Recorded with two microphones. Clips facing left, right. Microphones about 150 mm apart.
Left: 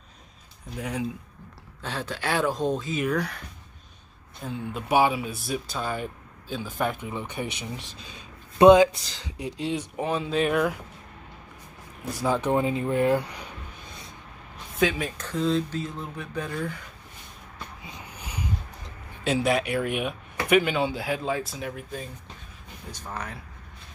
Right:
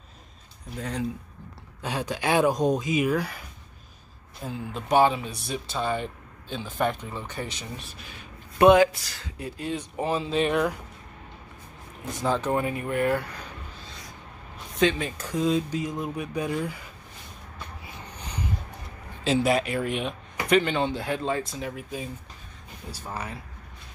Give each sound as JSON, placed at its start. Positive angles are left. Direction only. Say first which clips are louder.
{"t": 0.7, "sound": "speech", "louder": "left 1 dB", "side_deg": 10}
{"t": 1.8, "sound": "speech", "louder": "right 3 dB", "side_deg": -15}
{"t": 9.9, "sound": "speech", "louder": "right 2 dB", "side_deg": 0}
{"t": 12.2, "sound": "speech", "louder": "left 1 dB", "side_deg": 10}
{"t": 14.8, "sound": "speech", "louder": "right 1 dB", "side_deg": 0}
{"t": 15.1, "sound": "speech", "louder": "right 1 dB", "side_deg": -10}
{"t": 17.8, "sound": "vehicle", "louder": "even", "side_deg": 15}
{"t": 19.2, "sound": "speech", "louder": "right 1 dB", "side_deg": 0}